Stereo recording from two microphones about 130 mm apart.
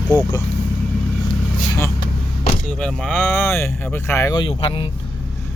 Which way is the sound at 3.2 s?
15° left (ahead or behind).